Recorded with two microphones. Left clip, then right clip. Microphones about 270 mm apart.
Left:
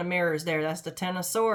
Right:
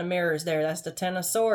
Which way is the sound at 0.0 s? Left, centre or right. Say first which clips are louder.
Even; centre.